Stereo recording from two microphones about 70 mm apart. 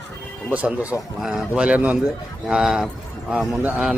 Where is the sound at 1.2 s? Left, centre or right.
Centre.